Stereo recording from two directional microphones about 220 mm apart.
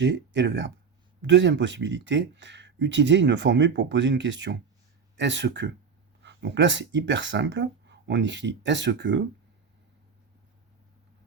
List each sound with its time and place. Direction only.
0.0 s speech: 55° right (ahead or behind)